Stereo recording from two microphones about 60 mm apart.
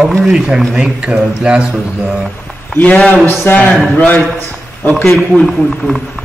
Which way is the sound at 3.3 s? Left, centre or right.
Left.